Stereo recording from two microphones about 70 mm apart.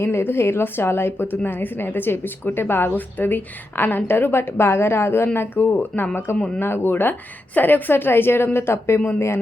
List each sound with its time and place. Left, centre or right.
0.0 s a woman's voice: left